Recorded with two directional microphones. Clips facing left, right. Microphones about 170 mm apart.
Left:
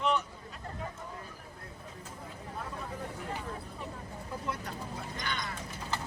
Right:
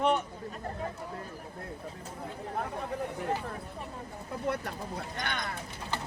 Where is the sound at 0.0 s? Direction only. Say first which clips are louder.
Right 3 dB; 45° right (ahead or behind).